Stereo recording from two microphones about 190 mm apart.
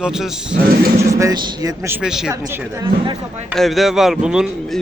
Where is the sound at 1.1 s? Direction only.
20° right (ahead or behind).